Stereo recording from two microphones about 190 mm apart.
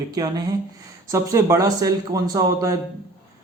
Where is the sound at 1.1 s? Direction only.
15° right (ahead or behind).